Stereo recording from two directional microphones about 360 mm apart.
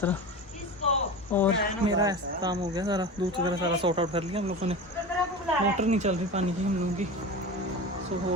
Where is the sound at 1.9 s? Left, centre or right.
Centre.